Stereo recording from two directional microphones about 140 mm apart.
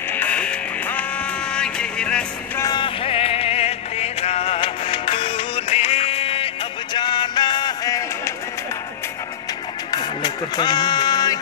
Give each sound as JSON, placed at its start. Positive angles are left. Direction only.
{"t": 0.1, "sound": "music", "side_deg": 10}
{"t": 2.6, "sound": "music", "side_deg": 30}
{"t": 3.0, "sound": "music", "side_deg": 45}
{"t": 9.8, "sound": "music", "side_deg": 30}